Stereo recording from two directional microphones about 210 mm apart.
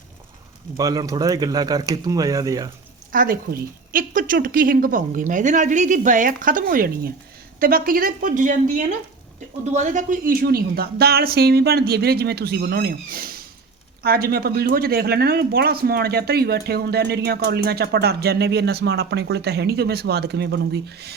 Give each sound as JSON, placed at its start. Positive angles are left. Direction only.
{"t": 0.8, "sound": "speech", "side_deg": -15}
{"t": 3.1, "sound": "a woman's voice", "side_deg": -40}